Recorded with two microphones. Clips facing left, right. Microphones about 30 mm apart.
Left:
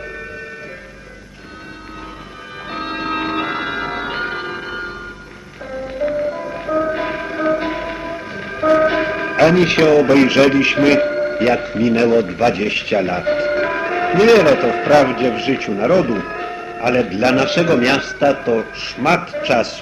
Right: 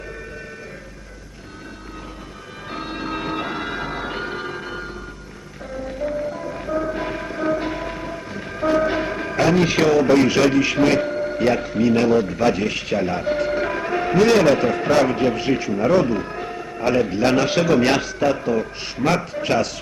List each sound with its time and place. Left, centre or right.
2.7 s music: left
5.9 s music: left